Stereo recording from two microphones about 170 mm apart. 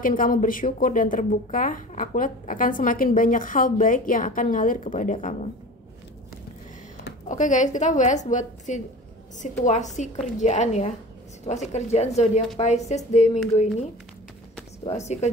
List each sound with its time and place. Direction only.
0.0 s speech: 55° left (ahead or behind)
7.2 s a woman's voice: 45° left (ahead or behind)
14.9 s a woman's voice: 40° left (ahead or behind)